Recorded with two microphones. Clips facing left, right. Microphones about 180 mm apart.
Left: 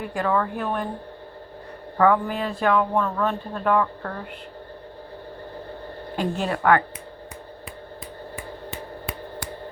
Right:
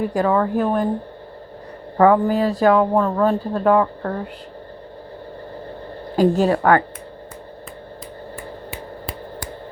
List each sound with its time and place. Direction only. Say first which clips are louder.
0.0 s speech: right 6 dB; 40° right (ahead or behind)
2.0 s speech: right 6 dB; 35° right (ahead or behind)
6.1 s speech: right 10 dB; 40° right (ahead or behind)